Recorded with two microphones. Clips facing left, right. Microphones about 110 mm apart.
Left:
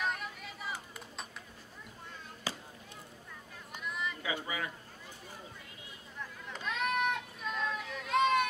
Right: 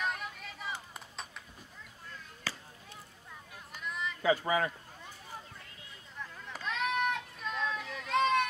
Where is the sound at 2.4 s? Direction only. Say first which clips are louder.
Left 2 dB; 15° left (ahead or behind).